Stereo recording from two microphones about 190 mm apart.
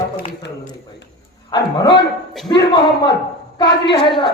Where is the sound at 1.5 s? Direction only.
20° left (ahead or behind).